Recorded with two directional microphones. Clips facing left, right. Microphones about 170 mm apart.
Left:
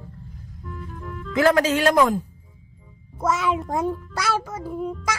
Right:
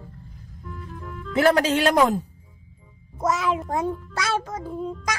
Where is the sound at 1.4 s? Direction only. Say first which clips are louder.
Left 1 dB; 35° right (ahead or behind).